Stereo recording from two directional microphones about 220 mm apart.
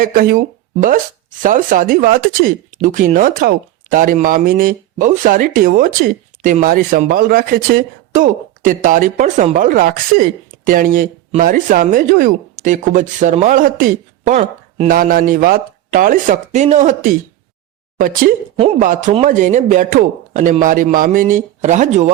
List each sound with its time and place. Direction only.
0.0 s speech: 40° right (ahead or behind)